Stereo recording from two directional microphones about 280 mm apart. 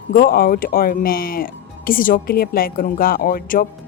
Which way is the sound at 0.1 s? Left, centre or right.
Left.